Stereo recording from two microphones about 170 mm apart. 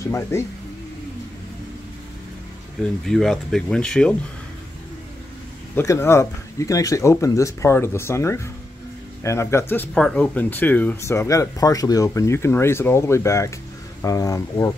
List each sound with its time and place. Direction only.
0.1 s speech: 15° left (ahead or behind)
2.8 s speech: 5° left (ahead or behind)
5.8 s speech: 15° left (ahead or behind)